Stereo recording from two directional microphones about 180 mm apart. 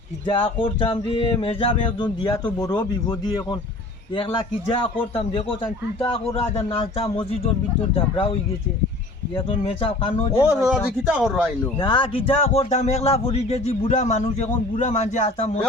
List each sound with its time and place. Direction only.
0.3 s speech: 30° left (ahead or behind)
10.4 s speech: 5° right (ahead or behind)
11.8 s speech: 30° left (ahead or behind)